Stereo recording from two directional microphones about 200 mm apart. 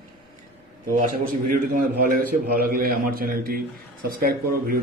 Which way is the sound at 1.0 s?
45° right (ahead or behind).